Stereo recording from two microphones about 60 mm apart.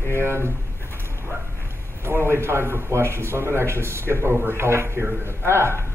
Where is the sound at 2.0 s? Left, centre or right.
Right.